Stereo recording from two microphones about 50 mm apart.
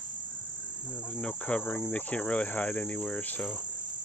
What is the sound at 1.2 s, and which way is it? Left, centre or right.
Cricket, centre.